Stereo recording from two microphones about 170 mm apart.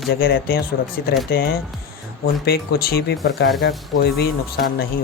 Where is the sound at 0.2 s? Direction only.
65° left (ahead or behind).